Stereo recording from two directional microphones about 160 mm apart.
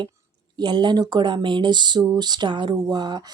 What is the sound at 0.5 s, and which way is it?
Speech, 25° right (ahead or behind).